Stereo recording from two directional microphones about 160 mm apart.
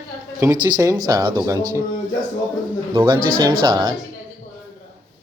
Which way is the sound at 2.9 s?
25° right (ahead or behind).